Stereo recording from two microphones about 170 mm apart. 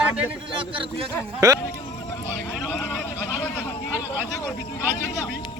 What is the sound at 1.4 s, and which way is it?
Speech, 20° right (ahead or behind).